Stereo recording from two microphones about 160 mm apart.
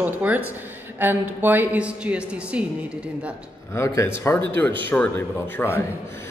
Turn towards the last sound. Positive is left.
turn(degrees=15)  # may be behind; listen again after turning